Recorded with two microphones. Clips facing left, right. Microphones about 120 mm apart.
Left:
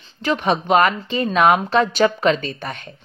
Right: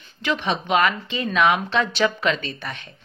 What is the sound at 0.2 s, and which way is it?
Speech, 45° left (ahead or behind).